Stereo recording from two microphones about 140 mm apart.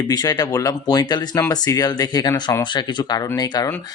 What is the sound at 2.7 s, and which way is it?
Speech, 30° left (ahead or behind).